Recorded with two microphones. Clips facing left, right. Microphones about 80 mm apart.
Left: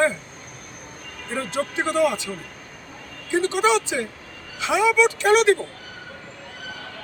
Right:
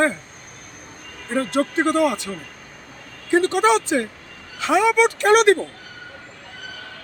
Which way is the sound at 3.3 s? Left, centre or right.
Right.